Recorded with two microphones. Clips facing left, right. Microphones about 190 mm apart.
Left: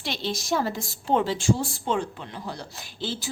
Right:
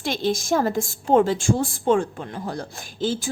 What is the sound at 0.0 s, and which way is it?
A woman's voice, 50° right (ahead or behind).